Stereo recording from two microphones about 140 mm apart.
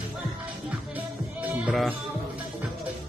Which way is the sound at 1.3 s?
Centre (ahead or behind).